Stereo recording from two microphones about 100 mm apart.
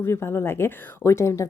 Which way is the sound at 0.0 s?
25° left (ahead or behind).